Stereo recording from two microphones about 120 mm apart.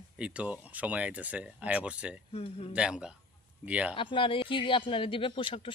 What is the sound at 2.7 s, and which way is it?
Speech, 5° right (ahead or behind).